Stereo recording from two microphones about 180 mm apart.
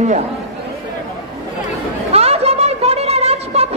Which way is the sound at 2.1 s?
35° right (ahead or behind).